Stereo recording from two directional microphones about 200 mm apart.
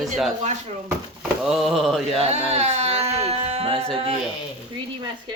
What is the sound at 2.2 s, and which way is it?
Speech, 35° right (ahead or behind).